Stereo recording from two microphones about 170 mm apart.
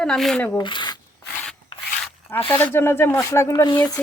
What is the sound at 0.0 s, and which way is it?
Speech, 5° left (ahead or behind).